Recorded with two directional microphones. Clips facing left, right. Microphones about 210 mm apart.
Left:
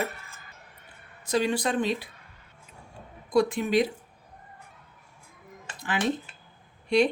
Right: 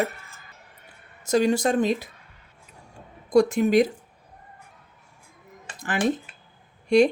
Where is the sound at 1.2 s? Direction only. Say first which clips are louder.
Right 5 dB; 45° right (ahead or behind).